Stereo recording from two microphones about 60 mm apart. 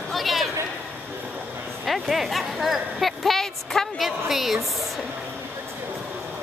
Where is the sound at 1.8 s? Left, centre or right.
Centre.